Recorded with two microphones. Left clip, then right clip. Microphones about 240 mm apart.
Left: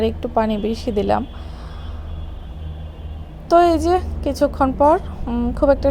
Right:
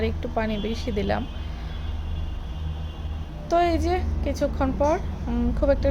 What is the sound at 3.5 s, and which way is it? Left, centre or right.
A woman's voice, left.